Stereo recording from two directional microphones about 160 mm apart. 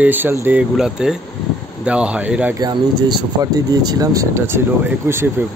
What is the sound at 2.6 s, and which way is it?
Speech, 25° right (ahead or behind).